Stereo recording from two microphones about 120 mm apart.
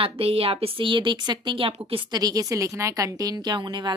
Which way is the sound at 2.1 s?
35° right (ahead or behind).